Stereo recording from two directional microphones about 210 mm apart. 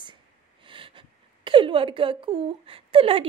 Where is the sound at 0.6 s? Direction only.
25° right (ahead or behind).